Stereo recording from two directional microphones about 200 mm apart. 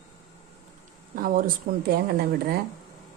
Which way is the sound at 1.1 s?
45° right (ahead or behind).